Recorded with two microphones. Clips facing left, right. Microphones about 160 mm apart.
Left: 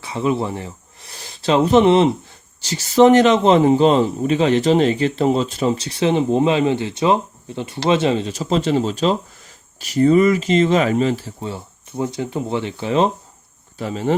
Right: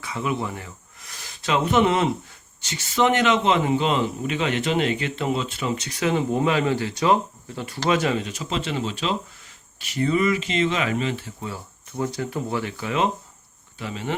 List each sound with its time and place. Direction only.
0.0 s a man's voice: 30° left (ahead or behind)
13.7 s a man's voice: 40° left (ahead or behind)